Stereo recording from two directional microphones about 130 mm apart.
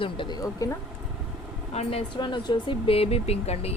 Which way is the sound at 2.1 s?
35° left (ahead or behind).